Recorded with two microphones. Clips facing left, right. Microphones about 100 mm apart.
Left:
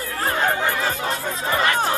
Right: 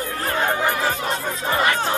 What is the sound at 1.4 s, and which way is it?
Speech, 25° right (ahead or behind).